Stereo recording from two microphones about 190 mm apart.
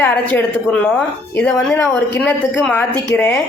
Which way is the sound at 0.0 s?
10° left (ahead or behind).